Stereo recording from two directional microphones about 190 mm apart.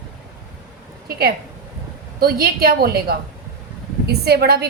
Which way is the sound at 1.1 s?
55° right (ahead or behind).